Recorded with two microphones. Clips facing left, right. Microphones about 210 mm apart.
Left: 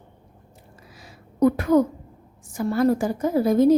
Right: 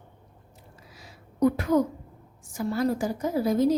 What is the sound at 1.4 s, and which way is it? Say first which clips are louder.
A woman's voice: left 4 dB; 55° left (ahead or behind).